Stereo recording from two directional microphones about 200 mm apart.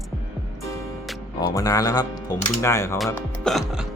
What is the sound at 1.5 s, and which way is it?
Speech, 15° left (ahead or behind).